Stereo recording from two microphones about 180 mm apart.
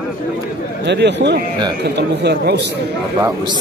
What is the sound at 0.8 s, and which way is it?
Speech, 70° right (ahead or behind).